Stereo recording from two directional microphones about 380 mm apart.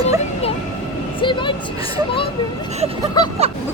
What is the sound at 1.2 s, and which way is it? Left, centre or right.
Speech, centre.